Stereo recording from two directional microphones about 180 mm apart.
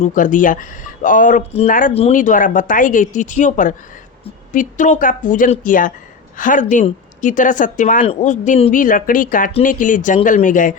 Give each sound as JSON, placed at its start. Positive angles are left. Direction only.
{"t": 0.0, "sound": "speech", "side_deg": 45}
{"t": 1.9, "sound": "speech", "side_deg": 35}